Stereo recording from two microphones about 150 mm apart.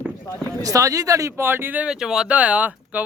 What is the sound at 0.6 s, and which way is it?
Speech, 20° right (ahead or behind).